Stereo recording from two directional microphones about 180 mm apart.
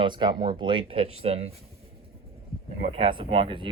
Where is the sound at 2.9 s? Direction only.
30° right (ahead or behind).